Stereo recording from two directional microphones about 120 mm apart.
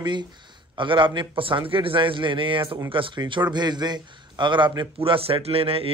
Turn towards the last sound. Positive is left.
turn(degrees=-55)  # may be behind; listen again after turning